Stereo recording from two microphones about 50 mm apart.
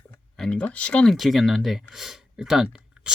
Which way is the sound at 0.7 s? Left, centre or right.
Left.